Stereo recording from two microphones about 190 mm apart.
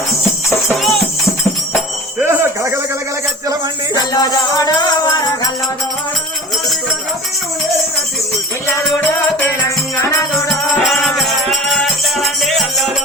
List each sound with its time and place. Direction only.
0.5 s music: centre (ahead or behind)
2.1 s a sound: 10° right (ahead or behind)
3.9 s music: 20° left (ahead or behind)
10.0 s music: 15° left (ahead or behind)
10.8 s music: centre (ahead or behind)